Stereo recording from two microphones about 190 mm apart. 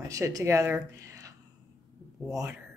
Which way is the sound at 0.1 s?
15° right (ahead or behind).